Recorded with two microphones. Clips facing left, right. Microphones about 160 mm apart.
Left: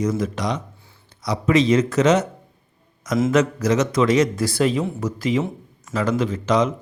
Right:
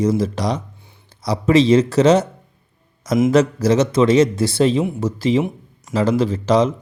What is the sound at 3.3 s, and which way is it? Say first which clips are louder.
Speech: right 3 dB; 30° right (ahead or behind).